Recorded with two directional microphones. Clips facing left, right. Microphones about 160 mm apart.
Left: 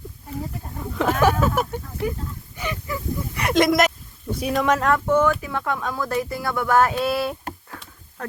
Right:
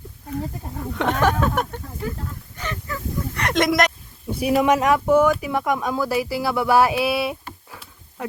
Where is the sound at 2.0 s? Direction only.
15° left (ahead or behind).